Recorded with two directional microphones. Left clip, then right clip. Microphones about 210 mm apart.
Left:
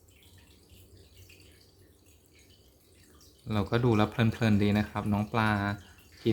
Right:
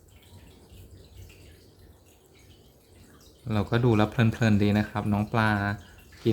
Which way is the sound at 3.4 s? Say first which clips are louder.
Right 2 dB; centre (ahead or behind).